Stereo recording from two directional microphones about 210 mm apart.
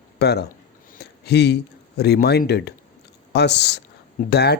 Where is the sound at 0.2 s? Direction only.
50° left (ahead or behind).